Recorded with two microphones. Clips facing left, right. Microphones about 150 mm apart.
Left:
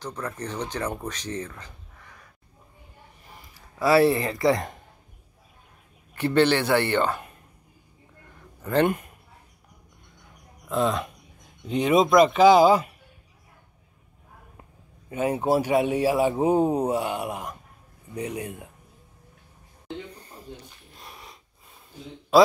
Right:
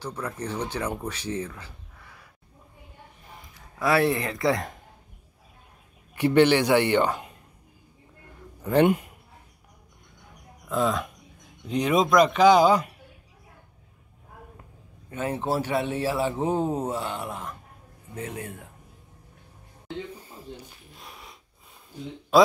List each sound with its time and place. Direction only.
0.0 s speech: 10° right (ahead or behind)
3.8 s speech: centre (ahead or behind)
6.1 s a man's voice: 15° right (ahead or behind)
8.6 s a man's voice: 10° right (ahead or behind)
10.7 s speech: centre (ahead or behind)
15.0 s speech: 10° left (ahead or behind)
20.2 s a sound: 5° right (ahead or behind)
22.3 s a man's voice: centre (ahead or behind)